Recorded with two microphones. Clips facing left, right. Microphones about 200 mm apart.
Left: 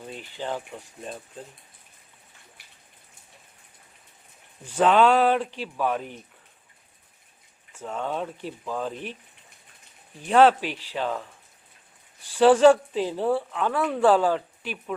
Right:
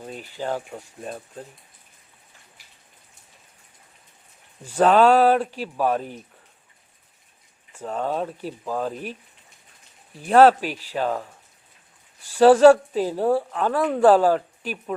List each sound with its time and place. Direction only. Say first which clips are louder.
0.4 s a woman's voice: right 4 dB; 40° right (ahead or behind)
4.6 s speech: right 3 dB; 10° right (ahead or behind)
4.9 s a woman's voice: right 4 dB; 40° right (ahead or behind)
5.5 s speech: right 3 dB; 10° right (ahead or behind)
5.8 s a woman's voice: right 4 dB; 40° right (ahead or behind)
7.8 s speech: right 4 dB; 10° right (ahead or behind)
8.0 s a woman's voice: right 4 dB; 40° right (ahead or behind)
8.9 s speech: right 3 dB; 10° right (ahead or behind)
10.2 s a woman's voice: right 3 dB; 40° right (ahead or behind)
10.7 s speech: right 2 dB; 10° right (ahead or behind)
10.9 s a woman's voice: right 4 dB; 40° right (ahead or behind)
12.2 s speech: right 3 dB; 10° right (ahead or behind)
12.5 s a woman's voice: right 3 dB; 40° right (ahead or behind)